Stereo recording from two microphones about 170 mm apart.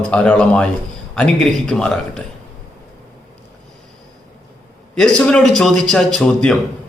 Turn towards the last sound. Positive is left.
turn(degrees=5)  # may be behind; listen again after turning